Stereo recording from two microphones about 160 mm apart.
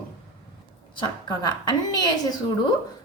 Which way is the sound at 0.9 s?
25° left (ahead or behind).